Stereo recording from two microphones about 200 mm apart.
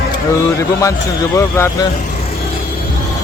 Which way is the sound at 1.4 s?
15° left (ahead or behind).